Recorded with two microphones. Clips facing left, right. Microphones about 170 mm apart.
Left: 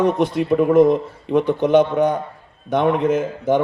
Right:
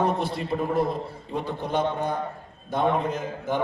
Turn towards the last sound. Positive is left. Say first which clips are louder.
# left 10 dB
turn(degrees=75)  # may be behind; listen again after turning